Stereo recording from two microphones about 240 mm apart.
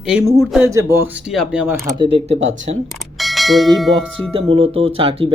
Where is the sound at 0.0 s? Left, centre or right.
Centre.